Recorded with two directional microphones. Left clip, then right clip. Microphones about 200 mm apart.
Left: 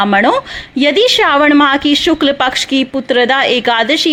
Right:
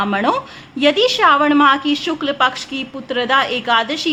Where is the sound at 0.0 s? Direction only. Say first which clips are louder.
Left 7 dB; 30° left (ahead or behind).